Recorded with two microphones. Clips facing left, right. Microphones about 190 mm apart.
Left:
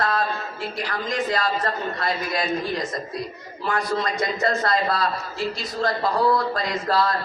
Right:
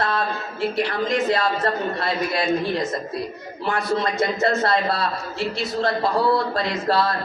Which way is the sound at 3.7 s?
25° right (ahead or behind).